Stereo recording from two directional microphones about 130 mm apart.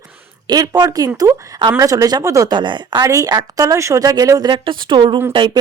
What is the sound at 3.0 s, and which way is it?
A woman's voice, 25° right (ahead or behind).